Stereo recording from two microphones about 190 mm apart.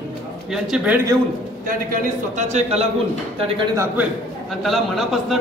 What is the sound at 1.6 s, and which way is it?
A man's voice, 40° right (ahead or behind).